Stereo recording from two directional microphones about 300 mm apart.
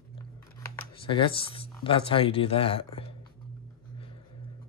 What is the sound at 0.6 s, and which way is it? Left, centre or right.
Speech, centre.